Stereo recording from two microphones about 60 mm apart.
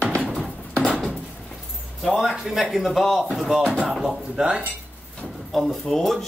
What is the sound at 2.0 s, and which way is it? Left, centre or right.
Speech, centre.